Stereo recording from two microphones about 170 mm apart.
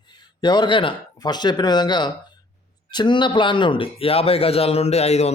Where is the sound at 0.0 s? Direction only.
25° left (ahead or behind).